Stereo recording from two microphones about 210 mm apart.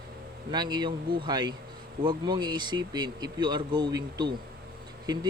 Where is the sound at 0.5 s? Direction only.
20° right (ahead or behind).